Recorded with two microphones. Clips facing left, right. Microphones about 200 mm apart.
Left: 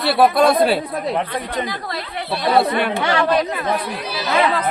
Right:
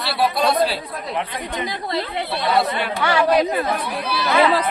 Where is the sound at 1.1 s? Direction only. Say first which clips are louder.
Even; 35° left (ahead or behind).